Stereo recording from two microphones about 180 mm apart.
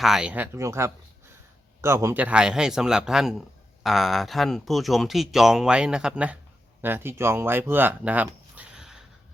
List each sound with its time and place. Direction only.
0.0 s speech: 5° right (ahead or behind)